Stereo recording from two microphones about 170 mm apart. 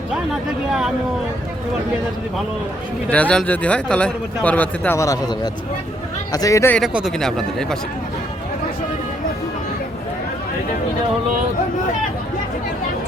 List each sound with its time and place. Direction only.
0.7 s speech: centre (ahead or behind)
3.1 s speech: 5° left (ahead or behind)
6.7 s speech: centre (ahead or behind)